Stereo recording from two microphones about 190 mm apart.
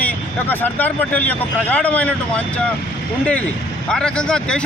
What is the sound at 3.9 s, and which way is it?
Speech, 5° left (ahead or behind).